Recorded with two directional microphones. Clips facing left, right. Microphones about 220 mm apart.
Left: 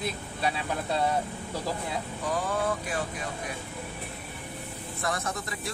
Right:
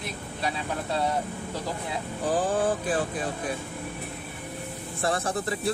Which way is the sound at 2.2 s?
30° right (ahead or behind).